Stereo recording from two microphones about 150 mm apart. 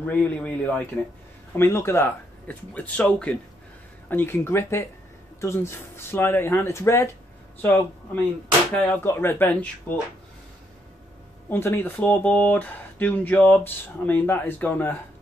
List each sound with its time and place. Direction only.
0.0 s speech: 10° left (ahead or behind)
11.4 s speech: 15° left (ahead or behind)